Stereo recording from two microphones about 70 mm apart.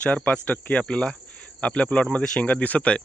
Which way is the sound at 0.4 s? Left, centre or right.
Centre.